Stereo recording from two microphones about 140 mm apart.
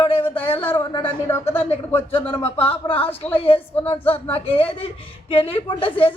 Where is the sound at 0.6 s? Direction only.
15° left (ahead or behind).